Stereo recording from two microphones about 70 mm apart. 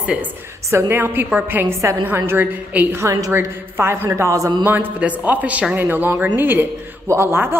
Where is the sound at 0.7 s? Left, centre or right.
Right.